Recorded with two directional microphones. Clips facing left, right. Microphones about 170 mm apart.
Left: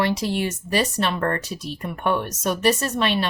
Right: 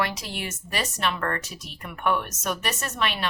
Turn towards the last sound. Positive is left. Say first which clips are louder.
# left 6 dB
turn(degrees=30)  # may be behind; listen again after turning